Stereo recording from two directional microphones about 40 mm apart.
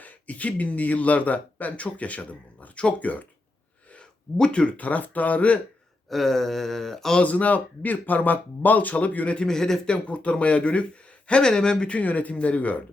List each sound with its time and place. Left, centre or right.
0.0 s speech: left
4.4 s speech: left
4.8 s speech: left
6.1 s a sound: centre
7.2 s speech: left
9.5 s a sound: centre
9.8 s speech: left
11.3 s speech: left